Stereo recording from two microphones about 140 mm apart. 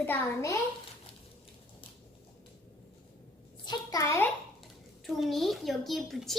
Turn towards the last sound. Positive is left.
turn(degrees=0)  # may be behind; listen again after turning